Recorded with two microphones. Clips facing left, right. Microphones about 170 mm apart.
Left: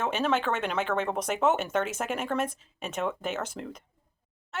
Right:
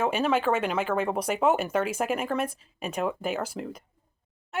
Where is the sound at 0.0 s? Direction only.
10° right (ahead or behind).